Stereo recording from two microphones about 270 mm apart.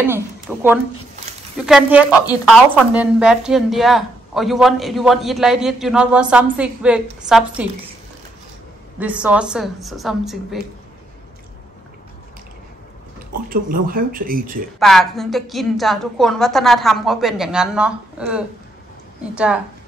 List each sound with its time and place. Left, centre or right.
0.0 s a woman's voice: centre
9.0 s a woman's voice: centre
13.5 s speech: right
14.8 s a woman's voice: centre